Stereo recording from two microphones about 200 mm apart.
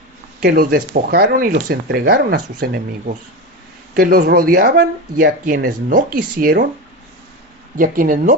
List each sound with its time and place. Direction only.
0.4 s speech: 45° right (ahead or behind)
7.8 s speech: 45° right (ahead or behind)